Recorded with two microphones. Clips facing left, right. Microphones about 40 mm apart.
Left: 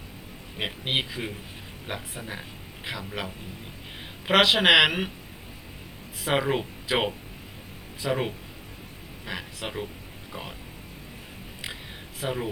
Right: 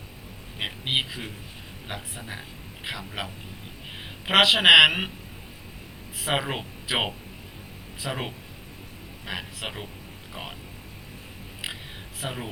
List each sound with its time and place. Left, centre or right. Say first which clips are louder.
0.6 s speech: right 1 dB; centre
6.1 s speech: left 2 dB; centre
12.2 s speech: left 4 dB; centre